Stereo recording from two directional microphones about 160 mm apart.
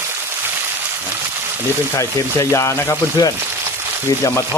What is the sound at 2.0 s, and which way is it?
Speech, 20° left (ahead or behind).